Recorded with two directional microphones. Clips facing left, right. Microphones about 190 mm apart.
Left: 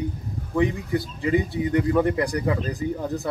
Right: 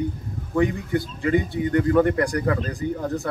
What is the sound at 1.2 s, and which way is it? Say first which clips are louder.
Speech: right 1 dB; 10° left (ahead or behind).